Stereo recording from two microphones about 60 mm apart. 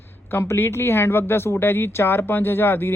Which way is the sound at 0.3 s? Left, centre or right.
Left.